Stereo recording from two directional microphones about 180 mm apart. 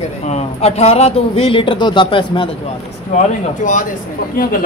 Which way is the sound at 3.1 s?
45° left (ahead or behind).